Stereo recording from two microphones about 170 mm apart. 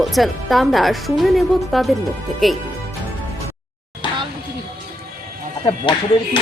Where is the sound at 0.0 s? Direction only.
Centre (ahead or behind).